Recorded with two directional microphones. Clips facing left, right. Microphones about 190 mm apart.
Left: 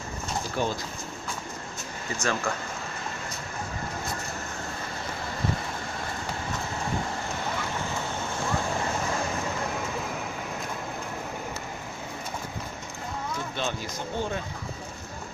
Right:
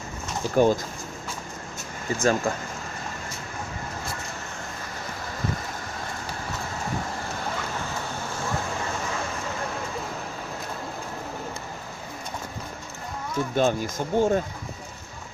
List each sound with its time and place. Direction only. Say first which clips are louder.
0.5 s speech: right 11 dB; 45° right (ahead or behind)
2.2 s speech: right 6 dB; 35° right (ahead or behind)
13.6 s speech: right 11 dB; 50° right (ahead or behind)